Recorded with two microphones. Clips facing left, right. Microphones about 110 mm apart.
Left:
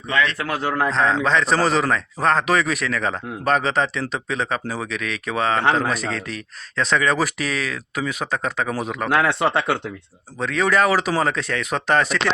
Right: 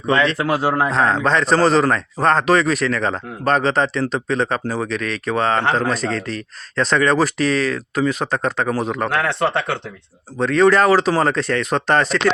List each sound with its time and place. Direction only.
0.1 s a man's voice: 30° right (ahead or behind)
0.3 s a man's voice: 10° right (ahead or behind); by 12.2 s 5° left (ahead or behind)